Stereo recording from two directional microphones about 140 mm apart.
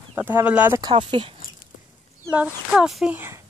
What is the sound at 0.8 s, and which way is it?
Speech, 35° right (ahead or behind).